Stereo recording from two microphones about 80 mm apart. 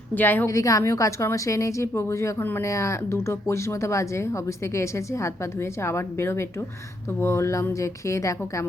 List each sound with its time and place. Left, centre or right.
0.1 s a woman's voice: left
0.4 s speech: left